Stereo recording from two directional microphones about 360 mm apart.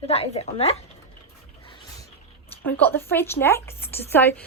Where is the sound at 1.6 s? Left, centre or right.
Centre.